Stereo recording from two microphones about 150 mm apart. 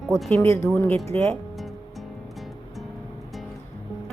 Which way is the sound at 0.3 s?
15° left (ahead or behind).